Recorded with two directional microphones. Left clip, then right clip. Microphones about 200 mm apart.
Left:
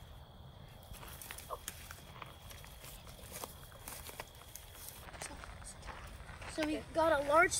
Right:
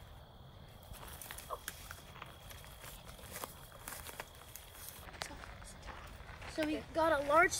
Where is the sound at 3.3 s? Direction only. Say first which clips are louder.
Right 1 dB; 10° right (ahead or behind).